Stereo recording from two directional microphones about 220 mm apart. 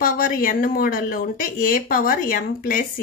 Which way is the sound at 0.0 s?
40° left (ahead or behind).